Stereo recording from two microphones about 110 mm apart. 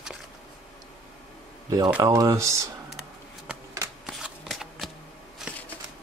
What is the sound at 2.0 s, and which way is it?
Speech, 30° right (ahead or behind).